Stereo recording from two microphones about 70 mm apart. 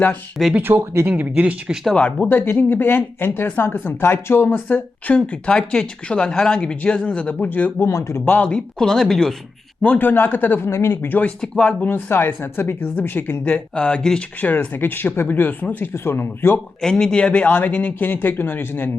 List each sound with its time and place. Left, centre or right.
0.5 s speech: right
1.9 s speech: centre
7.8 s speech: left
8.2 s speech: left; by 9.3 s centre
9.8 s speech: left
10.7 s speech: left
11.3 s speech: centre
11.9 s speech: left
13.4 s speech: centre; by 16.6 s left
16.8 s speech: centre; by 18.9 s left